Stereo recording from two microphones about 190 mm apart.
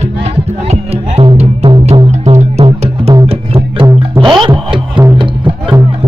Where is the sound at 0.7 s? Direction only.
35° right (ahead or behind).